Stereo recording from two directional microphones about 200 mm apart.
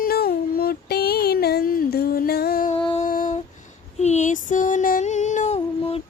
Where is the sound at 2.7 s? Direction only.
25° left (ahead or behind).